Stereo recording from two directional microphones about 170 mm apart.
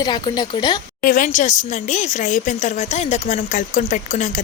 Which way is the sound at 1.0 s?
55° left (ahead or behind).